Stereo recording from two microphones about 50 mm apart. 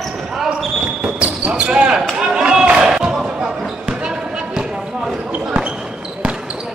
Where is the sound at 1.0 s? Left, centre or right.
Right.